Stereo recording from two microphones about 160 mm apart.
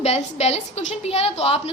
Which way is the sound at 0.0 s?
40° left (ahead or behind).